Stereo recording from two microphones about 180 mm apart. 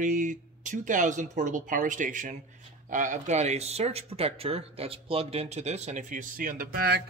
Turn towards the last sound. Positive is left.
turn(degrees=-55)  # may be behind; listen again after turning